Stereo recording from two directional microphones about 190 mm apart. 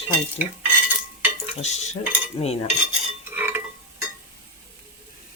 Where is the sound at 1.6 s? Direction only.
35° left (ahead or behind).